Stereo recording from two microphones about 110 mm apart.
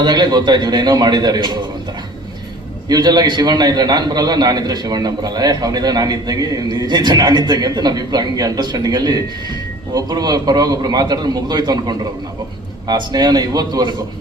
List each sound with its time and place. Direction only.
0.0 s a man's voice: 40° right (ahead or behind)
2.9 s a man's voice: 40° right (ahead or behind)